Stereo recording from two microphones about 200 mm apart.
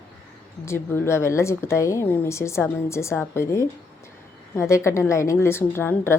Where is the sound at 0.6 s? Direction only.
15° left (ahead or behind).